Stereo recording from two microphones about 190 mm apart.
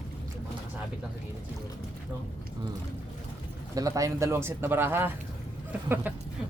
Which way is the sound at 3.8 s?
15° right (ahead or behind).